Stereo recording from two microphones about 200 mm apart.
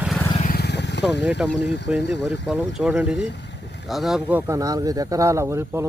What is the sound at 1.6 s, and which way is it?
Speech, 60° left (ahead or behind).